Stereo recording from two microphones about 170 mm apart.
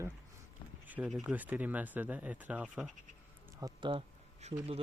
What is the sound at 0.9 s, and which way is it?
Speech, 5° right (ahead or behind).